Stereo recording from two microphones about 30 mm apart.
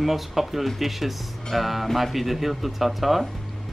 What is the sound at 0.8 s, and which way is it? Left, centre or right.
Speech, centre.